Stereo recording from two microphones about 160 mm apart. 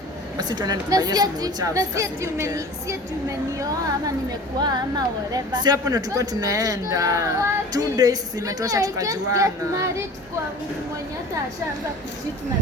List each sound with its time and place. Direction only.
0.3 s a woman's voice: 25° right (ahead or behind)